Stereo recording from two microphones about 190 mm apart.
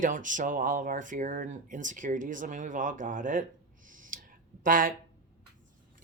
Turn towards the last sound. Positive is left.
turn(degrees=-45)  # may be behind; listen again after turning